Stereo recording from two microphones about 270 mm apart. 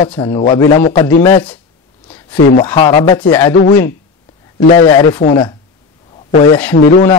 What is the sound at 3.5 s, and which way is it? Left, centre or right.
Speech, left.